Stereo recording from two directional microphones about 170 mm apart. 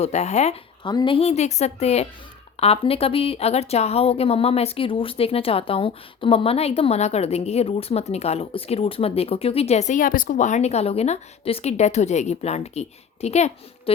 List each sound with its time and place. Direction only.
0.0 s a woman's voice: 40° left (ahead or behind)
0.9 s a woman's voice: 30° left (ahead or behind)